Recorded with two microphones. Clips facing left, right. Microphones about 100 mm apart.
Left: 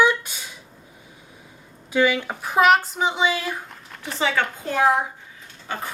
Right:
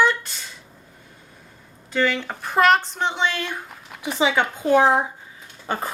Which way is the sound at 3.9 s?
15° right (ahead or behind).